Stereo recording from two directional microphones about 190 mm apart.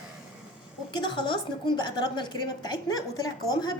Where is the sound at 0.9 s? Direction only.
25° left (ahead or behind).